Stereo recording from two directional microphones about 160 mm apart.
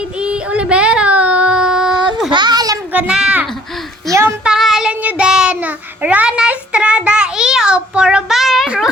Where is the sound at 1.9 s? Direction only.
30° right (ahead or behind).